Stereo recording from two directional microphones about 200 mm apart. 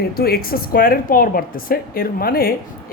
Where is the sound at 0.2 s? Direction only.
50° left (ahead or behind).